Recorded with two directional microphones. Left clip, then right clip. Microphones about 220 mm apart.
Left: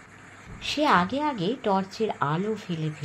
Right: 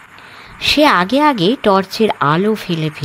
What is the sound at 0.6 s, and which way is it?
Speech, 55° right (ahead or behind).